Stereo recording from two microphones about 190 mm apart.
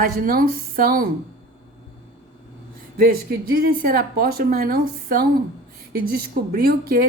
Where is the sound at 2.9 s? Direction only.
50° right (ahead or behind).